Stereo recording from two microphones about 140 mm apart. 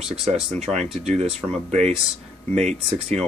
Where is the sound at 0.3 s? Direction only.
55° right (ahead or behind).